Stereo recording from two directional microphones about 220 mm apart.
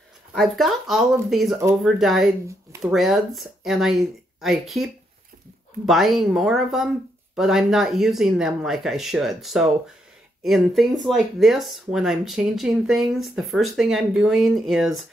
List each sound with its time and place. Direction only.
0.3 s speech: centre (ahead or behind)